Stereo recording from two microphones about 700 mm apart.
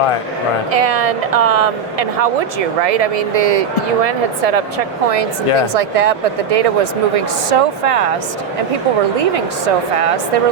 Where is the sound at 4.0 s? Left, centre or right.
Right.